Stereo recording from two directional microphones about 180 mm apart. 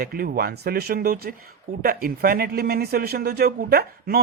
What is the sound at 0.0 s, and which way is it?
Speech, 55° right (ahead or behind).